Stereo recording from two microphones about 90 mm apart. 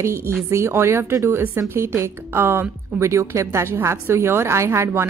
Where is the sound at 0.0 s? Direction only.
30° right (ahead or behind).